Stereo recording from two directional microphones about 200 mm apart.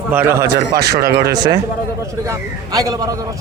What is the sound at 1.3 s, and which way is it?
A man's voice, 20° right (ahead or behind).